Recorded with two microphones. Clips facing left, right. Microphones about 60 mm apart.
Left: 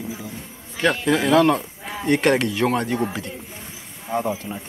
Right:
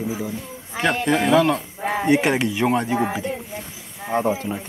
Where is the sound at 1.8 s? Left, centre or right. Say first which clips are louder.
Right 8 dB; right.